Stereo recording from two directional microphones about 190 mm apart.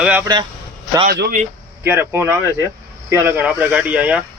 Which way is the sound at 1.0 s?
55° right (ahead or behind).